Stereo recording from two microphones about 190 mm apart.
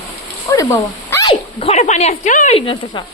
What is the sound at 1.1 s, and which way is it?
Dog, 15° left (ahead or behind).